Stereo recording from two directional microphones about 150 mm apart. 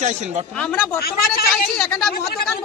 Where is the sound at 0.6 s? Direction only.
5° left (ahead or behind).